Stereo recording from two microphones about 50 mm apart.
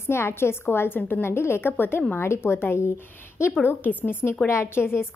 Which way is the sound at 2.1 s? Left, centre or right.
Left.